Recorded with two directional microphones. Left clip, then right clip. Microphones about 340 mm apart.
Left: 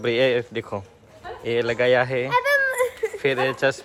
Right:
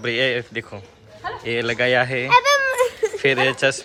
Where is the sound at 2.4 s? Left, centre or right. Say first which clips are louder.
Right 3 dB; centre.